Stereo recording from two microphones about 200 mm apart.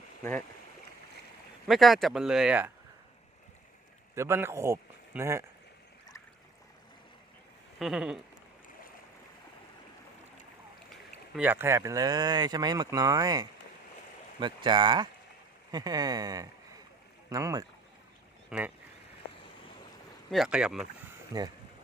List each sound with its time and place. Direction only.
1.6 s speech: centre (ahead or behind)
4.1 s a man's voice: 15° right (ahead or behind)
7.8 s speech: 5° right (ahead or behind)
11.3 s speech: 10° right (ahead or behind)
18.5 s speech: 5° right (ahead or behind)
20.3 s speech: centre (ahead or behind)